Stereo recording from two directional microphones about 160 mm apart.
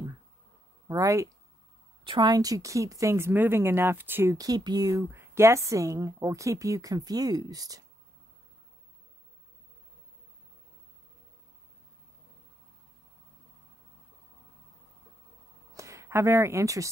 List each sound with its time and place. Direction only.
0.8 s speech: 20° right (ahead or behind)
15.7 s speech: 20° right (ahead or behind)